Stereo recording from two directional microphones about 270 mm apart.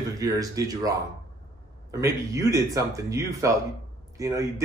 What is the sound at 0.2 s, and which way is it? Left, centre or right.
A man's voice, centre.